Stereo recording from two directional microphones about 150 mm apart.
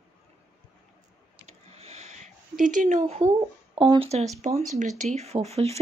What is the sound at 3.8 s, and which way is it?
Speech, 30° right (ahead or behind).